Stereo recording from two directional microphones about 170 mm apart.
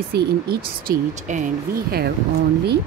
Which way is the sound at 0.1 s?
70° right (ahead or behind).